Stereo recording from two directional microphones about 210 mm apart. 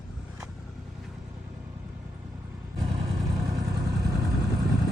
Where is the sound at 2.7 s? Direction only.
20° right (ahead or behind).